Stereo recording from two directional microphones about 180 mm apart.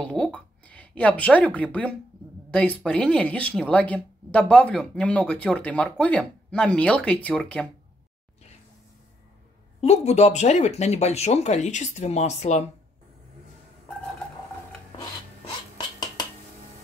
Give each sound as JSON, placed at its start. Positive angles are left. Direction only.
{"t": 0.0, "sound": "speech", "side_deg": 5}
{"t": 9.8, "sound": "speech", "side_deg": 35}